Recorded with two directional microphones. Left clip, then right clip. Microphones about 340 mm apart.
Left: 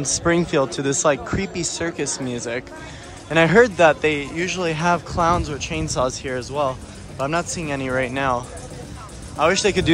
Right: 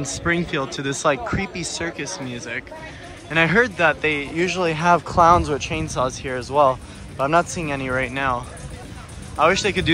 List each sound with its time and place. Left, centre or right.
0.0 s a man's voice: centre